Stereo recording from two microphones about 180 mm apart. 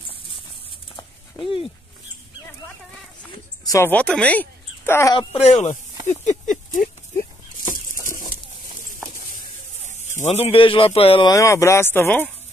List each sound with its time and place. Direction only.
1.4 s speech: 30° left (ahead or behind)
3.6 s speech: 15° left (ahead or behind)
5.1 s speech: 35° left (ahead or behind)
6.0 s a sound: 40° left (ahead or behind)
10.2 s speech: 35° left (ahead or behind); by 12.3 s 10° left (ahead or behind)